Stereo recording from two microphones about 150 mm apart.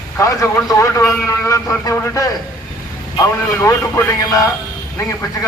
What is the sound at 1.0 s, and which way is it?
Speech, centre (ahead or behind).